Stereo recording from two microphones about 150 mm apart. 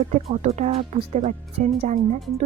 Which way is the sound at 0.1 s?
50° right (ahead or behind).